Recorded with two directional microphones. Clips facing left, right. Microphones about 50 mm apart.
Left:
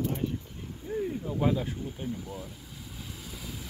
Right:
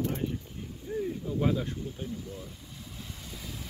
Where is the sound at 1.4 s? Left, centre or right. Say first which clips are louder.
Left 1 dB; centre.